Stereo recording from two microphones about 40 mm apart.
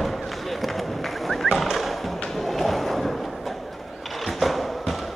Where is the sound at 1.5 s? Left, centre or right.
Centre.